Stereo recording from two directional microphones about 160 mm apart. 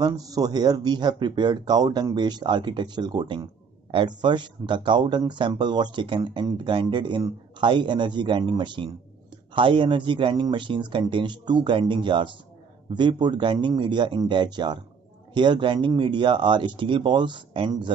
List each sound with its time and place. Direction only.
0.0 s speech: 25° right (ahead or behind)